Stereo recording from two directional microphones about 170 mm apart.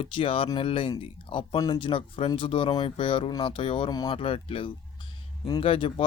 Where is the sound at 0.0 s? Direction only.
30° left (ahead or behind).